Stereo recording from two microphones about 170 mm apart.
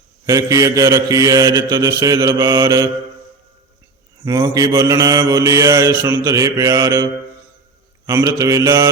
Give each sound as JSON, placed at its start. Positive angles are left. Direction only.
{"t": 0.3, "sound": "mantra", "side_deg": -20}
{"t": 4.4, "sound": "mantra", "side_deg": -20}